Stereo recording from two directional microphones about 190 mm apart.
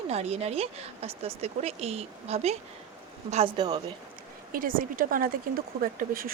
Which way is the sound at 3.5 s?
20° right (ahead or behind).